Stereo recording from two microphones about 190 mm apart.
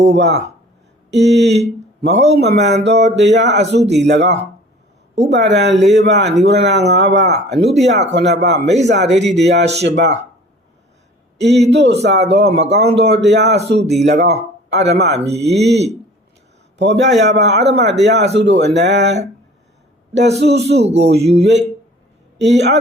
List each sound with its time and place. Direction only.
0.1 s speech: 65° right (ahead or behind)
11.3 s speech: 65° right (ahead or behind)
20.7 s speech: 35° right (ahead or behind)
21.0 s speech: 60° right (ahead or behind)